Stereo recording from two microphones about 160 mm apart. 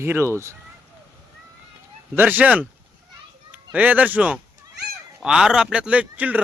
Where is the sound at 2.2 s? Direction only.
10° right (ahead or behind).